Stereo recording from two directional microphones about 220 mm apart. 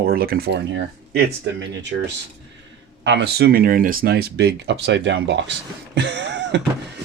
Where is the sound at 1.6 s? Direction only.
55° right (ahead or behind).